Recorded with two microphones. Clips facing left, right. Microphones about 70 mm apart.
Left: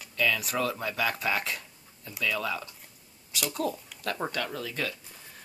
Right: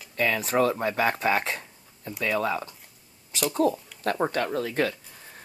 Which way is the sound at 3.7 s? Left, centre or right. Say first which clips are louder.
Right 6 dB; right.